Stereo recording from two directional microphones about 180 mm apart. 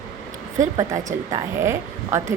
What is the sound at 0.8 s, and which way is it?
A woman's voice, 20° right (ahead or behind).